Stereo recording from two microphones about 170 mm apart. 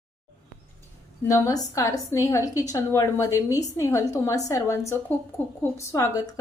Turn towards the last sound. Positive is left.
turn(degrees=20)  # may be behind; listen again after turning